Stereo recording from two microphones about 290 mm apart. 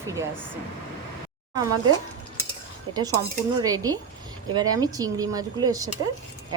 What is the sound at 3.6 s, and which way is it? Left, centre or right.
A woman's voice, centre.